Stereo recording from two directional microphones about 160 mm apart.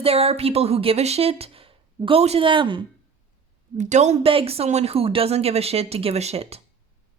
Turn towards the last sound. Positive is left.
turn(degrees=-40)  # may be behind; listen again after turning